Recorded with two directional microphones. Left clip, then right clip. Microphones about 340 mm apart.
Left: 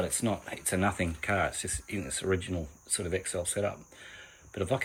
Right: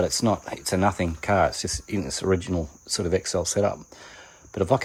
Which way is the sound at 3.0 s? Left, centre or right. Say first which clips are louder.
Right 9 dB; right.